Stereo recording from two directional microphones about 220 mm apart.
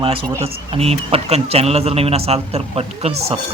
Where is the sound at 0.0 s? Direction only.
25° right (ahead or behind).